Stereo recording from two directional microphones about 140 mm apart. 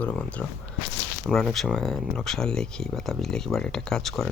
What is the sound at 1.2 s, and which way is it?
Speech, centre (ahead or behind).